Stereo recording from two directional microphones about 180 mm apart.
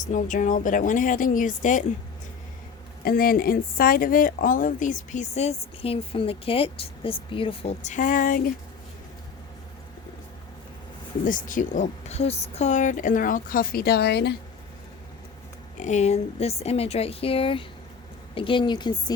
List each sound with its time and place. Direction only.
0.0 s speech: 45° left (ahead or behind)
3.0 s speech: 55° left (ahead or behind)
11.3 s speech: 45° left (ahead or behind); by 14.3 s 65° left (ahead or behind)
15.8 s speech: 40° left (ahead or behind); by 19.1 s 25° left (ahead or behind)